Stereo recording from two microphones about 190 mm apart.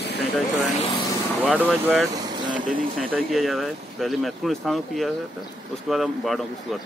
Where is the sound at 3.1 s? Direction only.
Centre (ahead or behind).